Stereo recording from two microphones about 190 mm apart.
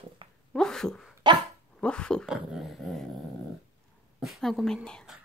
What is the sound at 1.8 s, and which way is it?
Speech, 5° left (ahead or behind).